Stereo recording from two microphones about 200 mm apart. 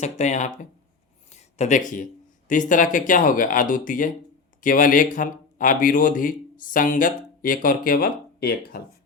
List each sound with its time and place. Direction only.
0.0 s speech: 35° left (ahead or behind)
1.3 s a sound: 35° left (ahead or behind)
2.5 s speech: 40° left (ahead or behind)